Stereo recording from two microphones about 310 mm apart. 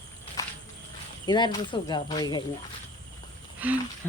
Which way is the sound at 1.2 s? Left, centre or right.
Centre.